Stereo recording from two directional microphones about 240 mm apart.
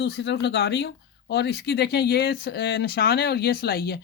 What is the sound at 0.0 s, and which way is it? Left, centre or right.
Speech, left.